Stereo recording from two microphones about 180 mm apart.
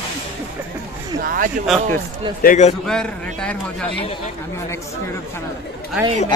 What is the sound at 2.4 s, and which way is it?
Speech, 40° left (ahead or behind).